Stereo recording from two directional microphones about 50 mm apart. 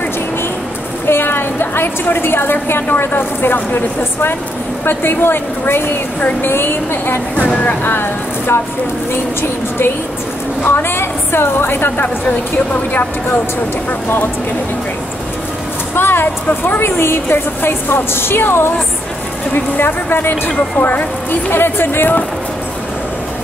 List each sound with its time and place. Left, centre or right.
1.0 s a woman's voice: left
7.3 s speech: left
7.8 s a woman's voice: left
15.9 s a sound: left
16.6 s a woman's voice: left